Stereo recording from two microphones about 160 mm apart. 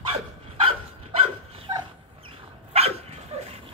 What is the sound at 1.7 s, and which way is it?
Dog, 25° right (ahead or behind).